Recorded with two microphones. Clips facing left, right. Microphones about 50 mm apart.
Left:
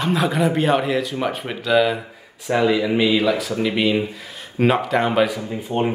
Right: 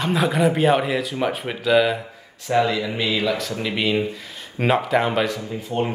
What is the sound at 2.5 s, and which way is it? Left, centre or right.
Speech, centre.